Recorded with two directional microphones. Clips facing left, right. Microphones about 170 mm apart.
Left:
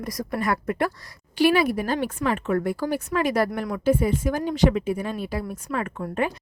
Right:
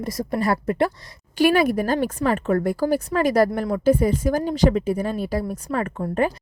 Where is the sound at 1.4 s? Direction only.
45° right (ahead or behind).